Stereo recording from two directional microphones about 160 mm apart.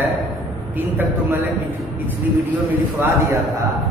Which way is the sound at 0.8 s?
15° right (ahead or behind).